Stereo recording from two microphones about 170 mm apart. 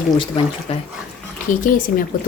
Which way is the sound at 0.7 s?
35° left (ahead or behind).